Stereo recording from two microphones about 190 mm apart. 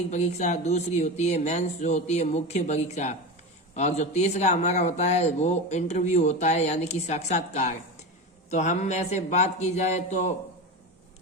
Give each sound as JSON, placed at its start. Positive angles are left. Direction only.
{"t": 0.1, "sound": "speech", "side_deg": 35}